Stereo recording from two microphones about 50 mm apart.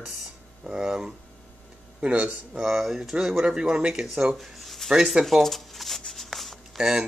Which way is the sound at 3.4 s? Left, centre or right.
Centre.